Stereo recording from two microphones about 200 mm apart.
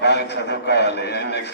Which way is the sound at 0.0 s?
60° left (ahead or behind).